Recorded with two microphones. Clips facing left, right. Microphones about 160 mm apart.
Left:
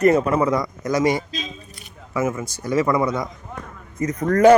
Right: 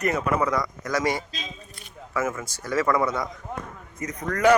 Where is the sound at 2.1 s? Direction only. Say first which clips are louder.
Left 4 dB; 20° left (ahead or behind).